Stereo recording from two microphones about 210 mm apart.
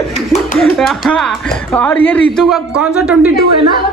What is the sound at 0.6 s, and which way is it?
Speech, centre (ahead or behind).